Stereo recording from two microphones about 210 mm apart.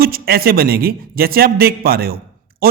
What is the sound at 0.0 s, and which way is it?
A man's voice, 45° right (ahead or behind).